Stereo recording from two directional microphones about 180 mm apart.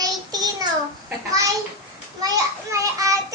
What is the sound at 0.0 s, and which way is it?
Child singing, 20° right (ahead or behind).